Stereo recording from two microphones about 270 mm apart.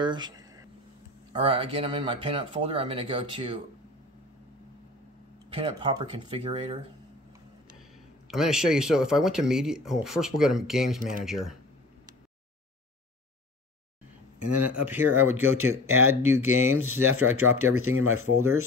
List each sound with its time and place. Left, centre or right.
0.0 s a sound: centre
1.3 s speech: right
5.5 s speech: centre
8.3 s speech: centre
15.0 s speech: right